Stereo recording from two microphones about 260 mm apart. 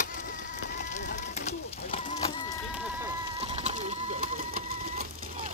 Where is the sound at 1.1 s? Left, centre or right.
Left.